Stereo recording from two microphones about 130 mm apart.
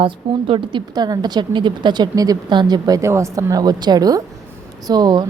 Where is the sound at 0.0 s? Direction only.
40° right (ahead or behind).